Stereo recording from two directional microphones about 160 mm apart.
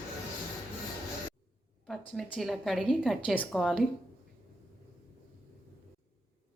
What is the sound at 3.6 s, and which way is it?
Speech, centre (ahead or behind).